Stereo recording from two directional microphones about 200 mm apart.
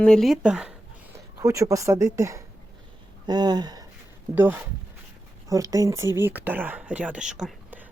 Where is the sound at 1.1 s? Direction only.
15° right (ahead or behind).